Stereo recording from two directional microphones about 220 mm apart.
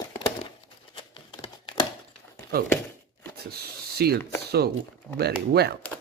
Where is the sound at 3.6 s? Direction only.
45° right (ahead or behind).